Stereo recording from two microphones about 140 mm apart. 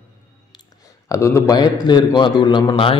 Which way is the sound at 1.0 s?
20° left (ahead or behind).